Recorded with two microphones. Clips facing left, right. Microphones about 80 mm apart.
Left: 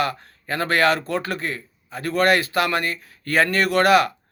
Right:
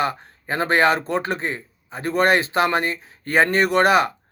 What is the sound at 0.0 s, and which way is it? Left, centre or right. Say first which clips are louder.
A man's voice: right 1 dB; right.